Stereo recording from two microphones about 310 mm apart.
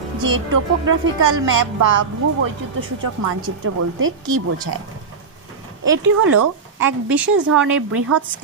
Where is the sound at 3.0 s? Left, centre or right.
Right.